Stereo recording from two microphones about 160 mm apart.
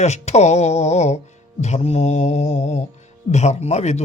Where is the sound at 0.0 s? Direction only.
45° left (ahead or behind).